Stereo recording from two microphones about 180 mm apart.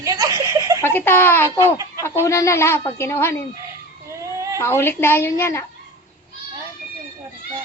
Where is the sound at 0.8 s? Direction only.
15° left (ahead or behind).